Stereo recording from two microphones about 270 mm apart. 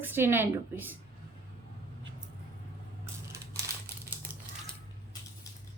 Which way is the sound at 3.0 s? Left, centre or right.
Centre.